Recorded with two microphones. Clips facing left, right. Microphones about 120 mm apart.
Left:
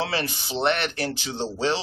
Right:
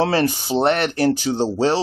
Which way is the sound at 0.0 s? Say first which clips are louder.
Right 9 dB; 45° right (ahead or behind).